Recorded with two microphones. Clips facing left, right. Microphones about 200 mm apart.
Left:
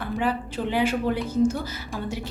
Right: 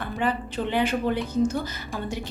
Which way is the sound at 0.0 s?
5° left (ahead or behind).